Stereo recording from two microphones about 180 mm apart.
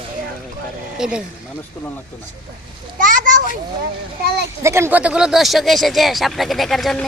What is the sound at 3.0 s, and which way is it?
Children playing, 50° right (ahead or behind).